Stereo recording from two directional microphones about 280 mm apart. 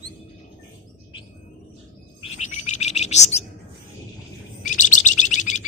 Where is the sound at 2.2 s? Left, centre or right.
Left.